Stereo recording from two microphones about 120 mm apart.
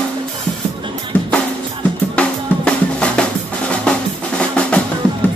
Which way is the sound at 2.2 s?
10° left (ahead or behind).